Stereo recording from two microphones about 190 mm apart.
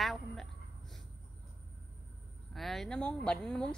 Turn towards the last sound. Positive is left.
turn(degrees=5)  # may be behind; listen again after turning